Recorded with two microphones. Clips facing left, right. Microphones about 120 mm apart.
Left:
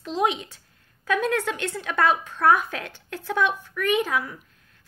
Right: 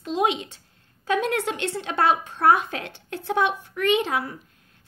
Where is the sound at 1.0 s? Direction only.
30° right (ahead or behind).